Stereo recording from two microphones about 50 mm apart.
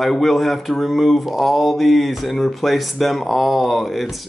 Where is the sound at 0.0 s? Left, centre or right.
Centre.